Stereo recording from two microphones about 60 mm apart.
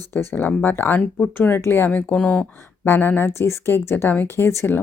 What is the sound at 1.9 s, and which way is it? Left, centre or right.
Speech, left.